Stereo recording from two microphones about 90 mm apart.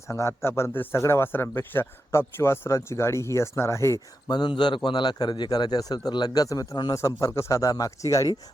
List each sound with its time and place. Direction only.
0.1 s a man's voice: 30° left (ahead or behind)
4.3 s a man's voice: 55° left (ahead or behind); by 8.3 s 35° left (ahead or behind)